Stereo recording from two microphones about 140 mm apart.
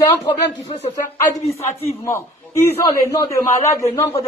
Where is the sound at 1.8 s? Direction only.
20° left (ahead or behind).